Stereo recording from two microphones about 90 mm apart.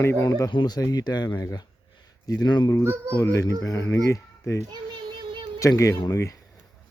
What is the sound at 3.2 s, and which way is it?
Speech, 35° left (ahead or behind).